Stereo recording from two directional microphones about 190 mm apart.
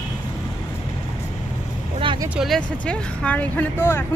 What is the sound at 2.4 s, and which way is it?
Speech, centre (ahead or behind).